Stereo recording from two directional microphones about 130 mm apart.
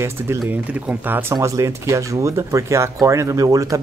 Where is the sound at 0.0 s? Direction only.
15° right (ahead or behind).